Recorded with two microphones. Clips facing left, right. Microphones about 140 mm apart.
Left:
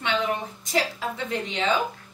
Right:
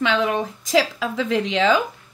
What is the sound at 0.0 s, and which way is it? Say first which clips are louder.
A woman's voice: right 6 dB; 90° right.